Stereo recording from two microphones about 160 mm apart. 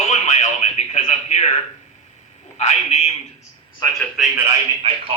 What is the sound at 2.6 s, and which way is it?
Speech, 45° left (ahead or behind).